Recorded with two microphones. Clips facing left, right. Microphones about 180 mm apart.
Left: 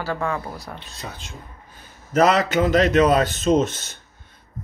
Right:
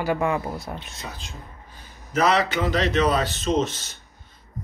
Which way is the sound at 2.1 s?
50° left (ahead or behind).